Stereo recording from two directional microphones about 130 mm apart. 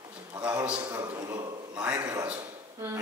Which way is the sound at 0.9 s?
30° right (ahead or behind).